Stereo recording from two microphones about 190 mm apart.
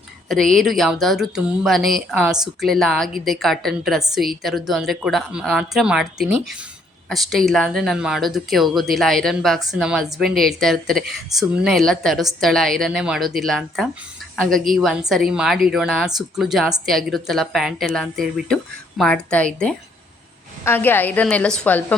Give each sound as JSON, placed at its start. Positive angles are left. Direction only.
{"t": 0.3, "sound": "a woman's voice", "side_deg": 0}